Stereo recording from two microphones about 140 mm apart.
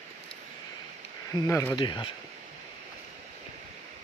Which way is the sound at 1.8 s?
35° left (ahead or behind).